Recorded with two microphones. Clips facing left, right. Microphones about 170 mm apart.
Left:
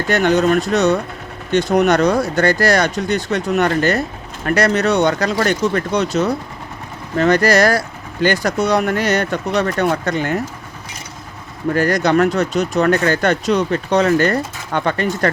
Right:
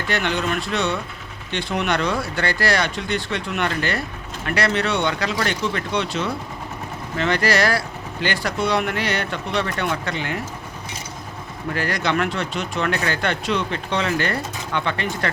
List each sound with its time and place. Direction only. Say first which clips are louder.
0.1 s speech: left 9 dB; 45° left (ahead or behind)
11.7 s speech: left 8 dB; 45° left (ahead or behind)